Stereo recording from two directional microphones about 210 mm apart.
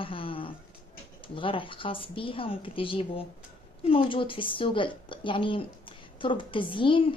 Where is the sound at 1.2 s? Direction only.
25° left (ahead or behind).